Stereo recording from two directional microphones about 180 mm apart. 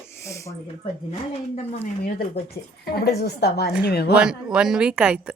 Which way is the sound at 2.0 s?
60° left (ahead or behind).